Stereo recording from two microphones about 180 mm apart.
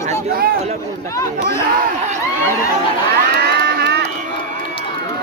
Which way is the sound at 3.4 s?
65° right (ahead or behind).